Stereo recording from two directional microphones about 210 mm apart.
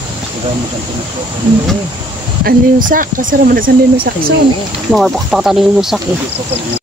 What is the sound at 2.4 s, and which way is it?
Speech, 40° right (ahead or behind).